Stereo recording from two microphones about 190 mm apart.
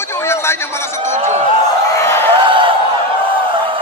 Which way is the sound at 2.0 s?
10° left (ahead or behind).